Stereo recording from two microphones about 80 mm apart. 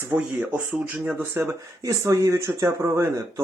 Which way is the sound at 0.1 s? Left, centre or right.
Right.